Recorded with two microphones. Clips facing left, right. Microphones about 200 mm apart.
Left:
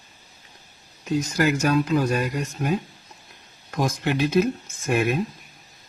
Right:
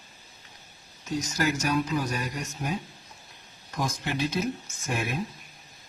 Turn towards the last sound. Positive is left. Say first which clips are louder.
# left 9 dB
turn(degrees=65)  # may be behind; listen again after turning